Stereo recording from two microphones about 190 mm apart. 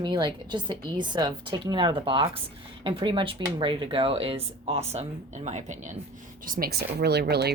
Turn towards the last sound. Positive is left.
turn(degrees=-60)  # may be behind; listen again after turning